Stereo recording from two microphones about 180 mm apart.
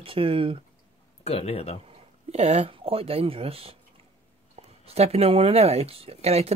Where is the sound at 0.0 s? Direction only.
30° right (ahead or behind).